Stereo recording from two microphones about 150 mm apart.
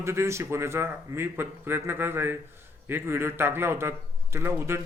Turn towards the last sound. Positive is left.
turn(degrees=-15)  # may be behind; listen again after turning